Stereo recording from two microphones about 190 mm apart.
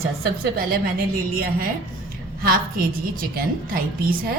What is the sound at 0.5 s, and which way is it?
A woman's voice, 50° right (ahead or behind).